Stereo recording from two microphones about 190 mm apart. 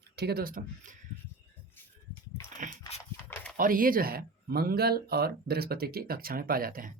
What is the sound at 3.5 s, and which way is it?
Speech, 45° right (ahead or behind).